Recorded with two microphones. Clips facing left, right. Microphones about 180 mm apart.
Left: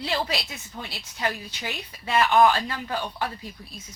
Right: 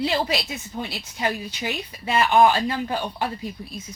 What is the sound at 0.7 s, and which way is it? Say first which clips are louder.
Speech: right 6 dB; 20° right (ahead or behind).